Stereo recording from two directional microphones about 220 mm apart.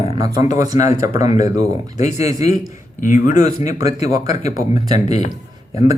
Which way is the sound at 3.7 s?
15° right (ahead or behind).